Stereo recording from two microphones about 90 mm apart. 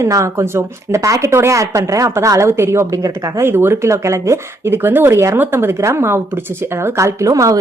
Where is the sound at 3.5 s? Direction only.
25° right (ahead or behind).